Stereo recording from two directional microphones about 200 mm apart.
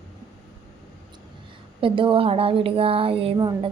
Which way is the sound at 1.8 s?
25° right (ahead or behind).